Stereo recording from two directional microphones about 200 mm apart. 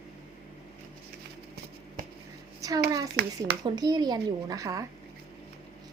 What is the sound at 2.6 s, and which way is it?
A child's voice, 15° right (ahead or behind).